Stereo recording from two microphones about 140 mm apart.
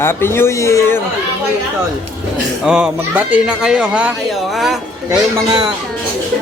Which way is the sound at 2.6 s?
5° right (ahead or behind).